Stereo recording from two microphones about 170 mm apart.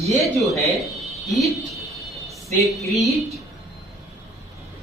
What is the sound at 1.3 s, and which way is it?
Speech, centre (ahead or behind).